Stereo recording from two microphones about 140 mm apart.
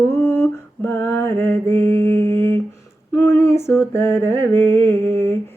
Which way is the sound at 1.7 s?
15° left (ahead or behind).